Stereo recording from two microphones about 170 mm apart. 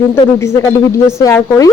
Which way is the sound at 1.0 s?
15° left (ahead or behind).